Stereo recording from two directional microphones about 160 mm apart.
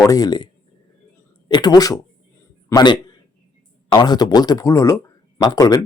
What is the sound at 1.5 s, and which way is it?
A man's voice, 25° left (ahead or behind).